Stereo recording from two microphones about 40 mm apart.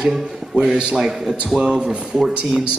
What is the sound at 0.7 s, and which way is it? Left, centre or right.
Speech, centre.